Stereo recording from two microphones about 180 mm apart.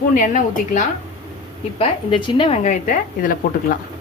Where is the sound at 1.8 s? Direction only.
30° left (ahead or behind); by 3.8 s 50° left (ahead or behind).